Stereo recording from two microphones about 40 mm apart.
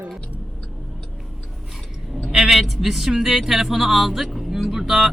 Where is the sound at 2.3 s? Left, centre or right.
Centre.